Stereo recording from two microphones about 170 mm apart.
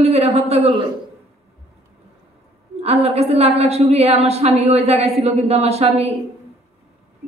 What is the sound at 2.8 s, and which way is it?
A woman's voice, 35° right (ahead or behind).